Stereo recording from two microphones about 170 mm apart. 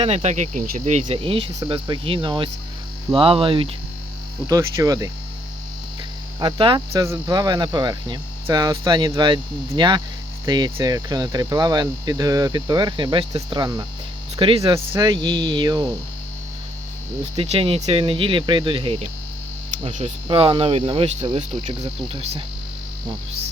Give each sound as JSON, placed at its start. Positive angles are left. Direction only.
{"t": 0.0, "sound": "speech", "side_deg": -40}
{"t": 1.0, "sound": "cricket", "side_deg": -30}
{"t": 1.5, "sound": "speech", "side_deg": -30}
{"t": 3.1, "sound": "cricket", "side_deg": -30}
{"t": 4.4, "sound": "speech", "side_deg": -20}
{"t": 6.4, "sound": "speech", "side_deg": -30}
{"t": 14.3, "sound": "cricket", "side_deg": -30}
{"t": 14.6, "sound": "speech", "side_deg": -20}
{"t": 17.3, "sound": "cricket", "side_deg": -35}